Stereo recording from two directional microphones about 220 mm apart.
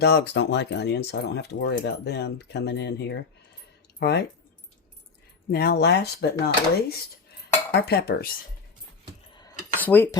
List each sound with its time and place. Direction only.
0.0 s speech: 50° left (ahead or behind)
5.5 s speech: 45° left (ahead or behind)
9.7 s speech: 10° left (ahead or behind)